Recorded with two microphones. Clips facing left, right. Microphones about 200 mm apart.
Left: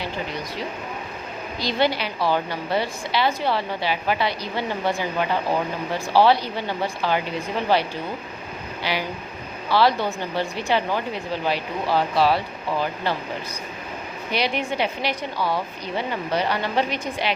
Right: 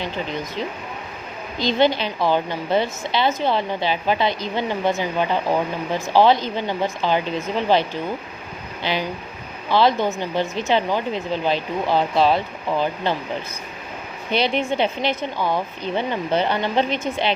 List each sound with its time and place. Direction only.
1.5 s a woman's voice: 20° right (ahead or behind)
14.3 s a woman's voice: 25° right (ahead or behind)